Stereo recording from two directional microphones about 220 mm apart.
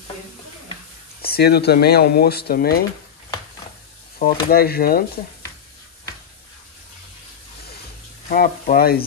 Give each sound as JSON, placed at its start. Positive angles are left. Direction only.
{"t": 1.2, "sound": "speech", "side_deg": 45}
{"t": 4.2, "sound": "speech", "side_deg": 45}
{"t": 8.3, "sound": "speech", "side_deg": 40}